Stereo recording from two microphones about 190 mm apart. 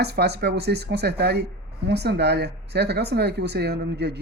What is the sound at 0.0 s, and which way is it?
Speech, 60° right (ahead or behind).